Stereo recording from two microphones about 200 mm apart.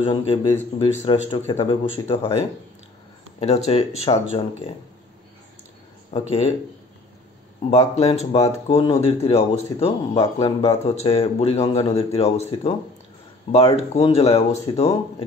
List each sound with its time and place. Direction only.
0.0 s speech: 25° left (ahead or behind)
6.1 s speech: 30° left (ahead or behind)
7.9 s speech: 30° left (ahead or behind)